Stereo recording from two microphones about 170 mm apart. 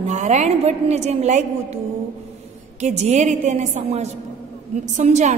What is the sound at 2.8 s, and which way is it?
A woman's voice, 40° right (ahead or behind).